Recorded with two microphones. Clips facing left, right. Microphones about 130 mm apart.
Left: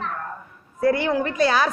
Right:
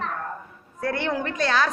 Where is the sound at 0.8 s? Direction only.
5° left (ahead or behind).